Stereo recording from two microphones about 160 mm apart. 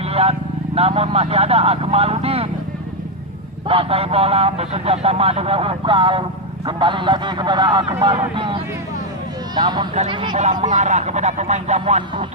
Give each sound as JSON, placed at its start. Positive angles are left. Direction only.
{"t": 0.1, "sound": "vehicle", "side_deg": -40}
{"t": 0.8, "sound": "speech", "side_deg": -40}
{"t": 3.7, "sound": "speech", "side_deg": -35}
{"t": 10.3, "sound": "speech", "side_deg": -50}